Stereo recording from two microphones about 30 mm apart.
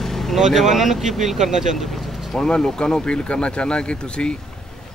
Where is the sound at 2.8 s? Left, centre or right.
Left.